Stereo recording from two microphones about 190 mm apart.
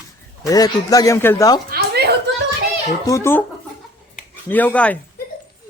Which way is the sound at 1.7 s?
55° right (ahead or behind).